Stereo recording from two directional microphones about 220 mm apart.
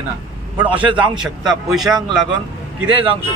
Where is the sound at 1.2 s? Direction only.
Centre (ahead or behind).